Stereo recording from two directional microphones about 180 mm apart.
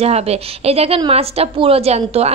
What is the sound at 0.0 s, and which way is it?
A woman's voice, 35° right (ahead or behind).